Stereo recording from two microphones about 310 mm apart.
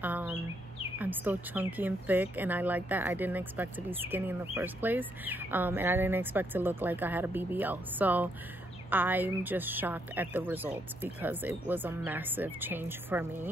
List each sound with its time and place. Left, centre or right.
0.0 s a woman's voice: centre